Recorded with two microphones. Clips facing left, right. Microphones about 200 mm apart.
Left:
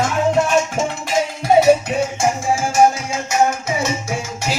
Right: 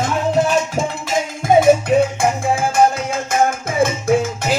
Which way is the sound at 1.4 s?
50° right (ahead or behind).